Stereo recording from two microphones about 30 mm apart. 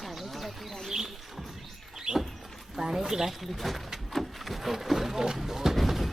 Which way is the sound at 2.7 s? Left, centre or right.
Centre.